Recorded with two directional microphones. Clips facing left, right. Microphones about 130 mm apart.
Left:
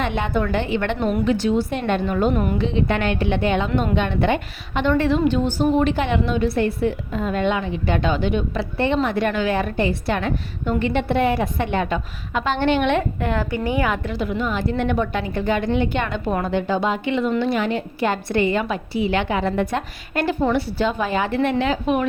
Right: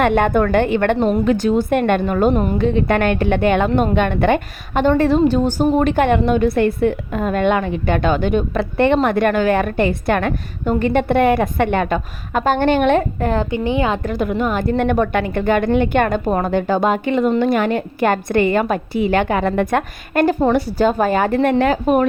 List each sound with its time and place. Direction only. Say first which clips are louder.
0.0 s a woman's voice: right 8 dB; 50° right (ahead or behind)
2.3 s a woman's voice: right 4 dB; 30° right (ahead or behind)
2.6 s a woman's voice: right 5 dB; 50° right (ahead or behind)
4.9 s a woman's voice: right 4 dB; 40° right (ahead or behind)
13.4 s a woman's voice: right 3 dB; 25° right (ahead or behind)
14.0 s a woman's voice: right 5 dB; 50° right (ahead or behind)